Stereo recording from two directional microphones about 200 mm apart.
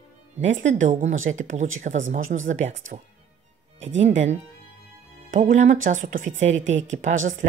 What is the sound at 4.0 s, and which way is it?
Speech, 35° right (ahead or behind).